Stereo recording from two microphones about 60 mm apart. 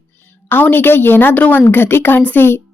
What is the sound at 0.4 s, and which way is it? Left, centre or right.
A woman's voice, left.